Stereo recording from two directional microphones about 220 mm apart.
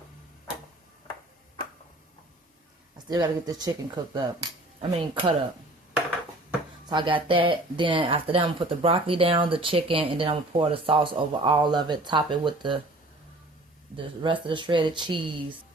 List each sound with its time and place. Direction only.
3.1 s speech: 20° right (ahead or behind)
6.9 s speech: 20° right (ahead or behind)
13.9 s speech: 20° right (ahead or behind)